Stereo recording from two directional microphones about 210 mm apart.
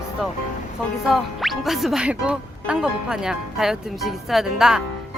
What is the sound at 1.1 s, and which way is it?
Speech, centre (ahead or behind).